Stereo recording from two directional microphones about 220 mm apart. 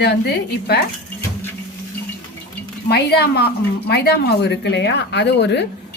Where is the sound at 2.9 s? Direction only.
45° left (ahead or behind).